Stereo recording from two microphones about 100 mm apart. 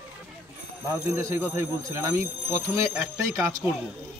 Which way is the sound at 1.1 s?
25° right (ahead or behind).